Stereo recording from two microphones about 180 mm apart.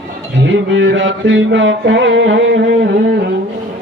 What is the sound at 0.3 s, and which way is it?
Music, 90° right.